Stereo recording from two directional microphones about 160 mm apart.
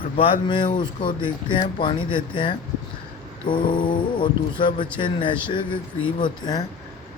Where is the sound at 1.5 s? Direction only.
30° left (ahead or behind).